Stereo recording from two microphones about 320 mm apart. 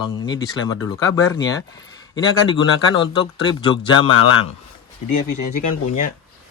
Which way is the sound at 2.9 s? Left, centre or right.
Centre.